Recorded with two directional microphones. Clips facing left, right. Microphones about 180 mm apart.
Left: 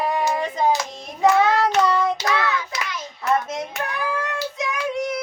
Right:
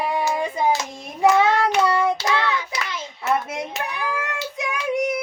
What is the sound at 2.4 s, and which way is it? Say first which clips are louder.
Hands: even; 25° right (ahead or behind).